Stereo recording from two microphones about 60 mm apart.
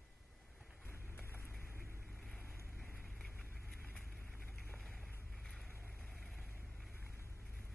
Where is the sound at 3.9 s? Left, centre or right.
Centre.